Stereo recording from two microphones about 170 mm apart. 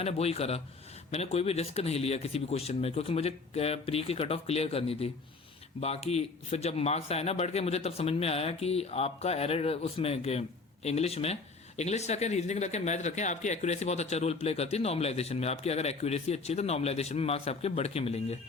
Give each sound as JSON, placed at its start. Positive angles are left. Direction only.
{"t": 0.0, "sound": "speech", "side_deg": 35}